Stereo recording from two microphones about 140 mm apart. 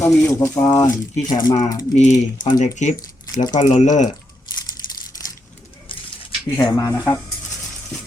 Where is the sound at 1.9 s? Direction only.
60° left (ahead or behind).